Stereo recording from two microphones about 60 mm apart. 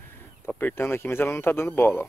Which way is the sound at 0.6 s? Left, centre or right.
Left.